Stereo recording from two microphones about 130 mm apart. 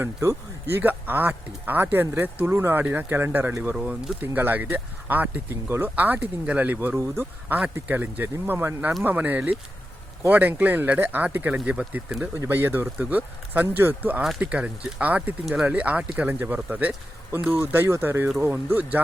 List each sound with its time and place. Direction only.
0.0 s speech: 20° right (ahead or behind)